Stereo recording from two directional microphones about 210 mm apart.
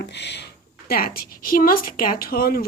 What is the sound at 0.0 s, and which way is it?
Speech, 55° left (ahead or behind).